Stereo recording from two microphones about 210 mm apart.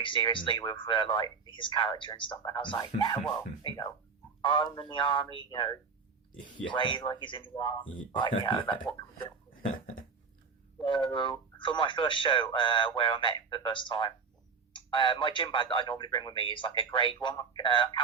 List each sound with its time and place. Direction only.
0.0 s speech: 25° left (ahead or behind)
10.8 s speech: 25° left (ahead or behind)